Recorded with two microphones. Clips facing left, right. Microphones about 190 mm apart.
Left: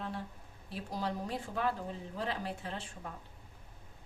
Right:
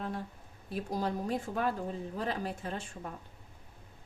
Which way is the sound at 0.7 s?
45° right (ahead or behind).